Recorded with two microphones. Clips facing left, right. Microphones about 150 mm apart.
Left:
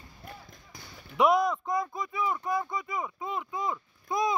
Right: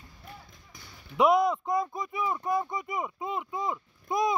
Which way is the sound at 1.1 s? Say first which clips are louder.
Right 1 dB; 25° right (ahead or behind).